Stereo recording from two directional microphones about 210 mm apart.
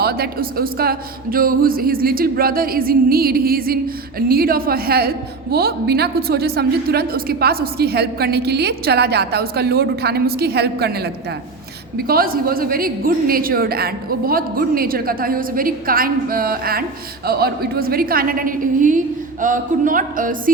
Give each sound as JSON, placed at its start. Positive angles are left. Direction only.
{"t": 0.0, "sound": "a woman's voice", "side_deg": -50}